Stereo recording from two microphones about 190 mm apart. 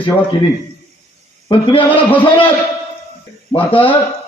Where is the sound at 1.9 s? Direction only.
10° left (ahead or behind).